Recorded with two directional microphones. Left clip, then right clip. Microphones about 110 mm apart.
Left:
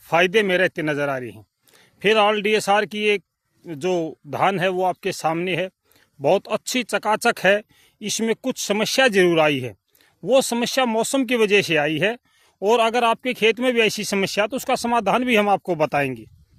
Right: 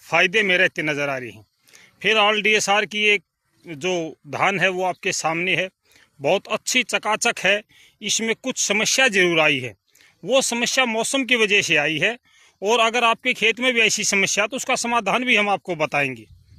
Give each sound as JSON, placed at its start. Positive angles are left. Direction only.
{"t": 0.0, "sound": "speech", "side_deg": 45}
{"t": 4.3, "sound": "speech", "side_deg": 40}